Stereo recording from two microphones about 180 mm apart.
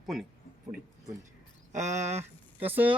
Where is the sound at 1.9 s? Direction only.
15° right (ahead or behind).